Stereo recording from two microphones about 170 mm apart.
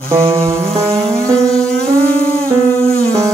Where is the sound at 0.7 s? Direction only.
35° right (ahead or behind).